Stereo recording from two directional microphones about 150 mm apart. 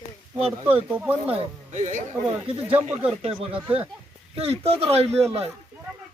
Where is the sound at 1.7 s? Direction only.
55° right (ahead or behind).